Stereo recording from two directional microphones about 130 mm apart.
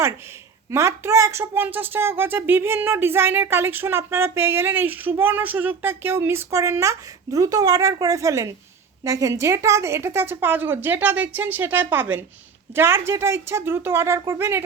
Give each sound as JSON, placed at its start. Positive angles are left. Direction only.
{"t": 0.7, "sound": "speech", "side_deg": -20}